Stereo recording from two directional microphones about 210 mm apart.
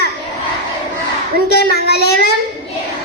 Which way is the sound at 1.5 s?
50° left (ahead or behind).